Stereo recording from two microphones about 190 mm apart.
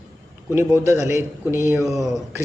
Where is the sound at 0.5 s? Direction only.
15° right (ahead or behind).